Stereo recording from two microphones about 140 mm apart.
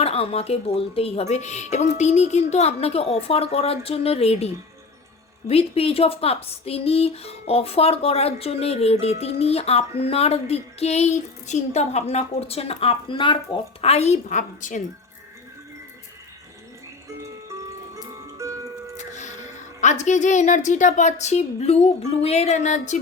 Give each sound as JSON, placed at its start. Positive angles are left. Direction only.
{"t": 0.0, "sound": "speech", "side_deg": 45}
{"t": 13.8, "sound": "a woman's voice", "side_deg": 50}
{"t": 17.2, "sound": "music", "side_deg": -20}
{"t": 18.9, "sound": "a woman's voice", "side_deg": 60}